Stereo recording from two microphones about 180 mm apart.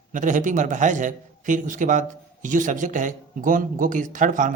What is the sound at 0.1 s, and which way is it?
A man's voice, 45° right (ahead or behind).